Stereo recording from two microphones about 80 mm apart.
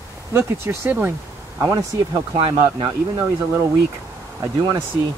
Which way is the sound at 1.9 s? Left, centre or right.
Right.